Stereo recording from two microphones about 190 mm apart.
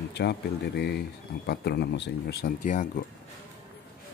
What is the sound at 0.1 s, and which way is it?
Speech, 60° left (ahead or behind).